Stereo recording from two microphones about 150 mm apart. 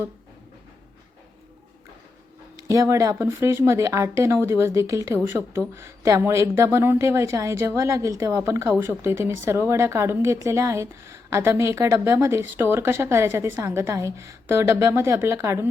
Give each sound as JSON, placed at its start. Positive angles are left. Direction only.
{"t": 2.6, "sound": "speech", "side_deg": -20}